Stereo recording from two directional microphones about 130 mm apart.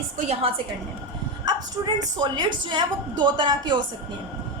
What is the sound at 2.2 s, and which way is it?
A woman's voice, 35° right (ahead or behind).